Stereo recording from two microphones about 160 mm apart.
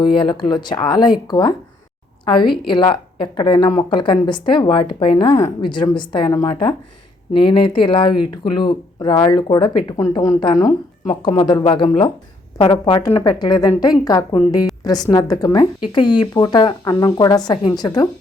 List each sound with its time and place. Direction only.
0.0 s a woman's voice: 30° left (ahead or behind)